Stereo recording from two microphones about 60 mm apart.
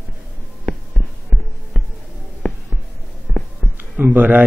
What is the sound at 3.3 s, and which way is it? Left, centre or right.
Heart sounds, centre.